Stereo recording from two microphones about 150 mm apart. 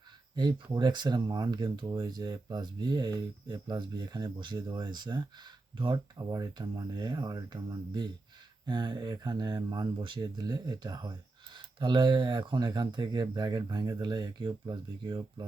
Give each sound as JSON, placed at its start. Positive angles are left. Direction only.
{"t": 0.3, "sound": "speech", "side_deg": -30}